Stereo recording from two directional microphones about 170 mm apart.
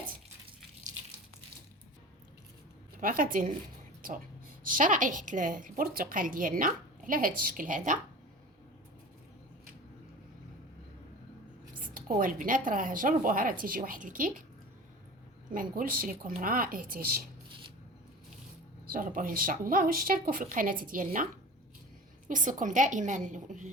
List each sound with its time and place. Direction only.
3.0 s speech: 55° right (ahead or behind)
4.6 s a woman's voice: 50° right (ahead or behind)
11.8 s a woman's voice: 55° right (ahead or behind)
15.5 s speech: 55° right (ahead or behind)
18.9 s speech: 55° right (ahead or behind)
22.3 s a woman's voice: 50° right (ahead or behind)